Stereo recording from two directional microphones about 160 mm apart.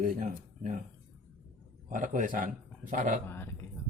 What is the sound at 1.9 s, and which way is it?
Speech, 55° right (ahead or behind).